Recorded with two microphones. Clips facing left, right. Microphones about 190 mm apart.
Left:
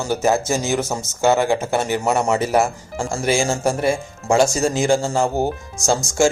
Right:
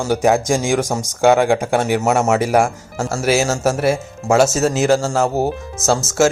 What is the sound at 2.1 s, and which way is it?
Speech, 85° right.